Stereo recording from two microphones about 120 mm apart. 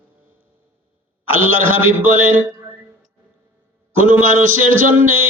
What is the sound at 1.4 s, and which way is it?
Speech, 15° right (ahead or behind).